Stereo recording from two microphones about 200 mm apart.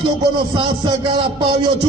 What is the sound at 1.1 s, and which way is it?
Speech, 25° right (ahead or behind).